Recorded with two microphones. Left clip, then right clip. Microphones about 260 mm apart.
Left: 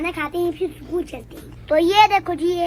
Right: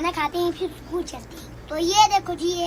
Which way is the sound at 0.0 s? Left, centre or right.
Centre.